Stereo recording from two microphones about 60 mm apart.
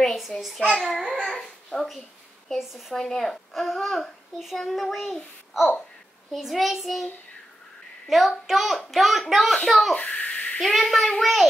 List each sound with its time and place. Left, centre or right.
0.0 s child singing: centre
0.4 s a child's voice: centre
1.3 s babbling: centre
2.6 s a child's voice: centre
3.0 s a child's voice: centre
8.1 s a child's voice: centre
9.9 s a sound: left
10.8 s a child's voice: centre